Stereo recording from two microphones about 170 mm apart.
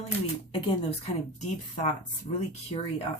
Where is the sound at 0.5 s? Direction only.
35° left (ahead or behind).